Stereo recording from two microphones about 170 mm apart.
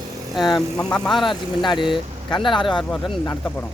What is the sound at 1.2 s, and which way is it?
Speech, 30° left (ahead or behind).